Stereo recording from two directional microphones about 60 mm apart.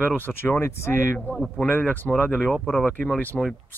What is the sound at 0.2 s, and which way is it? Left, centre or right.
Speech, left.